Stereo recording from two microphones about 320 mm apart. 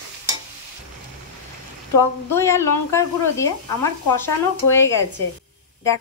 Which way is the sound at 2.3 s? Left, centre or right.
Centre.